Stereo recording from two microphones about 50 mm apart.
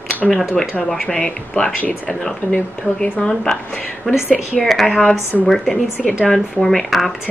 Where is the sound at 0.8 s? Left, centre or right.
Centre.